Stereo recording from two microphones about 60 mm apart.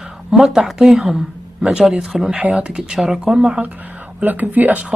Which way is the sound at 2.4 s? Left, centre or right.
Centre.